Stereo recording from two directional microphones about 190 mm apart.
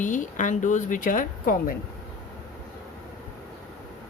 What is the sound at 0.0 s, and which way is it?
Speech, 40° left (ahead or behind).